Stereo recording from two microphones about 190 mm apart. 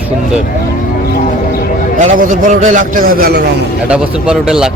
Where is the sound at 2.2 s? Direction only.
45° right (ahead or behind).